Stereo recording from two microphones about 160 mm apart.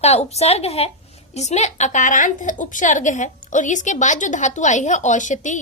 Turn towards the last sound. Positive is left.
turn(degrees=50)  # may be behind; listen again after turning